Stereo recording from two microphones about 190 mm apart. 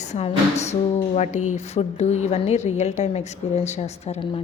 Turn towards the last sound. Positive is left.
turn(degrees=30)  # may be behind; listen again after turning